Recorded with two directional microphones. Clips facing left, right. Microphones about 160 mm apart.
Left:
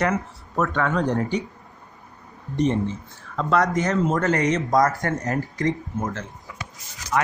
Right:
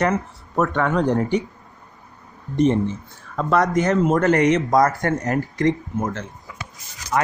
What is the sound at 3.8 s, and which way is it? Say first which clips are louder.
Speech: right 4 dB; 55° right (ahead or behind).